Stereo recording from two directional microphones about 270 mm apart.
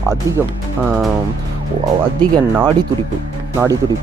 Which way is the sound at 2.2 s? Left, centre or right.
Centre.